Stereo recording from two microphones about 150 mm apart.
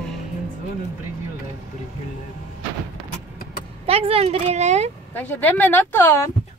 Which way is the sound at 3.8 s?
40° right (ahead or behind).